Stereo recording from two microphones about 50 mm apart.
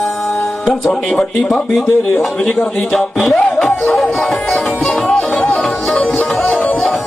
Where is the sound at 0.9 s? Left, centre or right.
Centre.